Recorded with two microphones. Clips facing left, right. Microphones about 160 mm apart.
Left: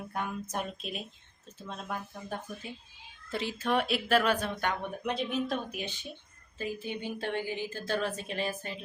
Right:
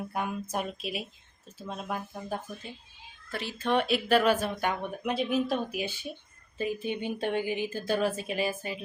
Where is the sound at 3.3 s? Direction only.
20° left (ahead or behind).